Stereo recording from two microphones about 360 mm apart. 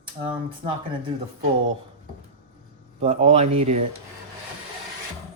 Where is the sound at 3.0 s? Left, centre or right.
Centre.